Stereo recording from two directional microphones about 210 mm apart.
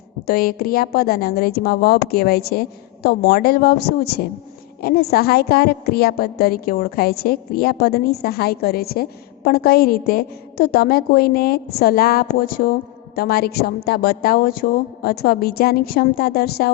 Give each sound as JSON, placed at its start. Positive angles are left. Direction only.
{"t": 0.3, "sound": "a woman's voice", "side_deg": 45}